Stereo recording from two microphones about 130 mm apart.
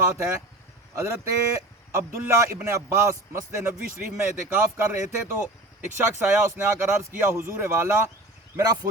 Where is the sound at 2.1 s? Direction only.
20° right (ahead or behind).